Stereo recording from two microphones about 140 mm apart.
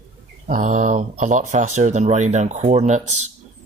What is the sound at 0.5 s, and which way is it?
Speech, 65° right (ahead or behind).